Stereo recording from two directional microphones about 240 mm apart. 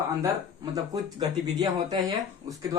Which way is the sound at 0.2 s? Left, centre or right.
Centre.